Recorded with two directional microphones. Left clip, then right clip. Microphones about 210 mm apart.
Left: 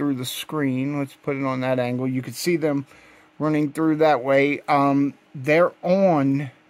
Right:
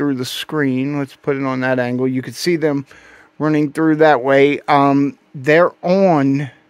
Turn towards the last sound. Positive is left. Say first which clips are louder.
# right 5 dB
turn(degrees=-40)  # may be behind; listen again after turning